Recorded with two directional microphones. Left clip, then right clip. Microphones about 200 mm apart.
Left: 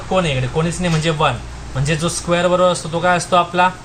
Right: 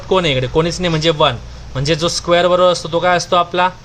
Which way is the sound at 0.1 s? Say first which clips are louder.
Right 4 dB; 55° right (ahead or behind).